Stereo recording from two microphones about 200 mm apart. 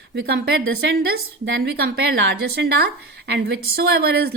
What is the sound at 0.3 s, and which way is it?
A woman's voice, 55° right (ahead or behind).